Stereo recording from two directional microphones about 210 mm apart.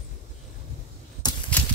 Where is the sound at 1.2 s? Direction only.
20° left (ahead or behind).